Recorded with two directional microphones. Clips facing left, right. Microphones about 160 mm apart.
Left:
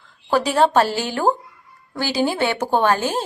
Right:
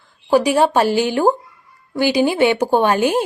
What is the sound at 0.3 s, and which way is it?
A woman's voice, 15° right (ahead or behind).